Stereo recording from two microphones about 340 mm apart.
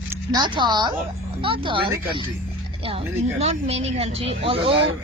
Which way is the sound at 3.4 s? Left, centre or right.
Centre.